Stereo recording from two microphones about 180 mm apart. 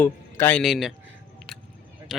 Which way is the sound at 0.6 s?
Centre (ahead or behind).